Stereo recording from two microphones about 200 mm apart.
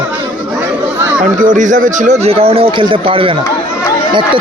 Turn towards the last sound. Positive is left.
turn(degrees=-25)  # may be behind; listen again after turning